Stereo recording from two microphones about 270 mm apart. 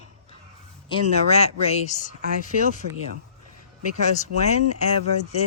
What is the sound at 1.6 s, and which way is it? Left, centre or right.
Speech, left.